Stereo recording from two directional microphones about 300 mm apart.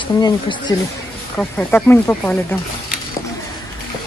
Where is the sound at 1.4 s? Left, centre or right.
Centre.